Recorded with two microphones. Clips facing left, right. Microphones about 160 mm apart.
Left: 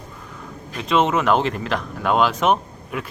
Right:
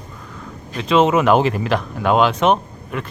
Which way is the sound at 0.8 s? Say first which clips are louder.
Right 4 dB; centre (ahead or behind).